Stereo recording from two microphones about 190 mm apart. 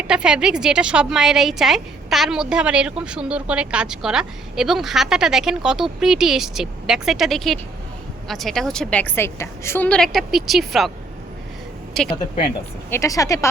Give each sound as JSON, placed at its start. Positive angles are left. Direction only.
{"t": 0.0, "sound": "a woman's voice", "side_deg": -5}
{"t": 12.0, "sound": "a woman's voice", "side_deg": 0}
{"t": 12.9, "sound": "speech", "side_deg": 15}